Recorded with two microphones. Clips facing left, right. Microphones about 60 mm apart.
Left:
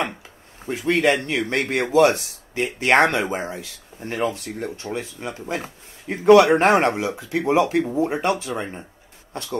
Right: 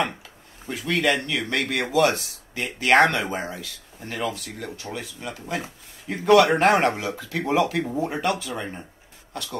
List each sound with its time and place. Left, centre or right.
0.7 s speech: left